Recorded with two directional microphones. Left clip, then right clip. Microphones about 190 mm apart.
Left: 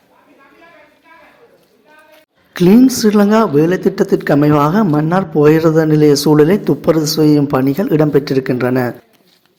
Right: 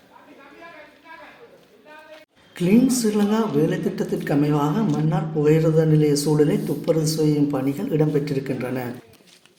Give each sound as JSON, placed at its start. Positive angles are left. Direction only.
{"t": 2.5, "sound": "speech", "side_deg": 45}